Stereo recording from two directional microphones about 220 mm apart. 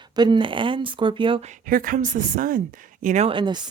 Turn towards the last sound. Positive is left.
turn(degrees=-20)  # may be behind; listen again after turning